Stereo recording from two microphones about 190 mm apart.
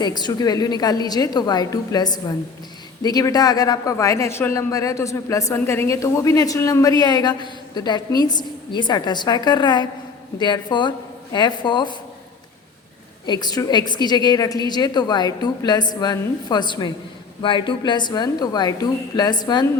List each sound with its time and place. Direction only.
0.0 s speech: 20° left (ahead or behind)
13.2 s speech: 20° left (ahead or behind)